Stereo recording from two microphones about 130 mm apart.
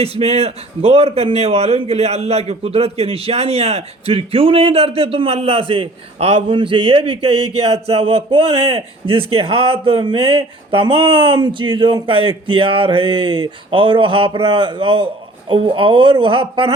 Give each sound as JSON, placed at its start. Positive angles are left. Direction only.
{"t": 0.0, "sound": "a man's voice", "side_deg": -50}